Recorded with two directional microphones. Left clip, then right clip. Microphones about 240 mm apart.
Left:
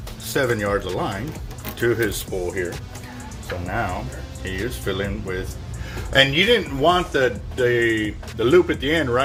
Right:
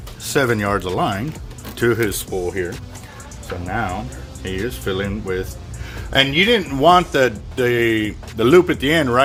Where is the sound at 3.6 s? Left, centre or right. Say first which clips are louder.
Right 2 dB; right.